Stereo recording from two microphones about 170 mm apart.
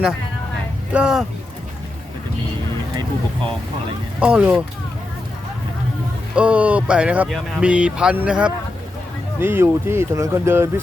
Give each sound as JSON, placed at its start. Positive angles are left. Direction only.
{"t": 0.9, "sound": "speech", "side_deg": -5}
{"t": 4.2, "sound": "speech", "side_deg": -5}
{"t": 6.3, "sound": "speech", "side_deg": -10}